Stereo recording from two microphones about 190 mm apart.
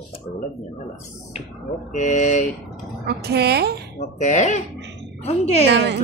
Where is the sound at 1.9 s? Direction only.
40° left (ahead or behind).